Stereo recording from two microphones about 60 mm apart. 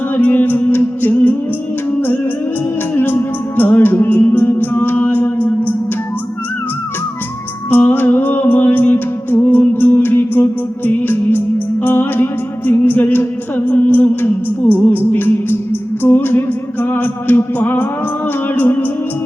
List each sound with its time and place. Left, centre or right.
0.2 s music: left
2.9 s music: left
7.7 s music: left